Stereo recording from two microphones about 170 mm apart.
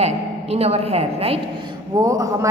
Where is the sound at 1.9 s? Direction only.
20° right (ahead or behind).